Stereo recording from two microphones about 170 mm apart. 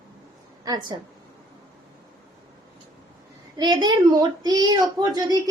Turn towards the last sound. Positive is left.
turn(degrees=-25)  # may be behind; listen again after turning